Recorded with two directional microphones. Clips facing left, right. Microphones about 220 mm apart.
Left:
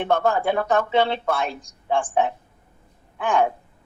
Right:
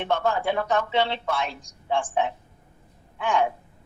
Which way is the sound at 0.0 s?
50° left (ahead or behind).